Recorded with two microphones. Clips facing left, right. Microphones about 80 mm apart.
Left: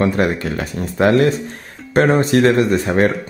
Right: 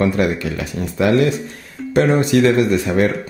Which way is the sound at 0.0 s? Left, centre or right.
Left.